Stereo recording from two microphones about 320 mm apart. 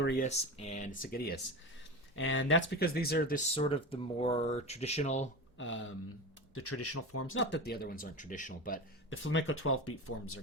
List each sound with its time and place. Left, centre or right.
0.0 s speech: left
5.5 s speech: left
9.0 s speech: left